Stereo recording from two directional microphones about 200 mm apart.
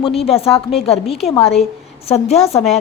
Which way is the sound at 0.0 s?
30° left (ahead or behind).